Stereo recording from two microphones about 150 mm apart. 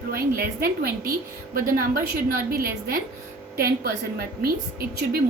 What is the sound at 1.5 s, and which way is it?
A woman's voice, 80° right.